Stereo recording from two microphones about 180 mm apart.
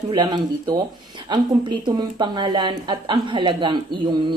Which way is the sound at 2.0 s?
25° right (ahead or behind).